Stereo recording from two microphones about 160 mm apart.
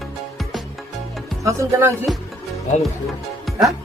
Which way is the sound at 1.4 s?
20° right (ahead or behind).